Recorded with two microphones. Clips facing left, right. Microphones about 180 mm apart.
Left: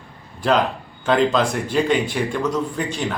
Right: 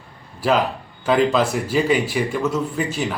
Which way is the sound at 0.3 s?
5° right (ahead or behind).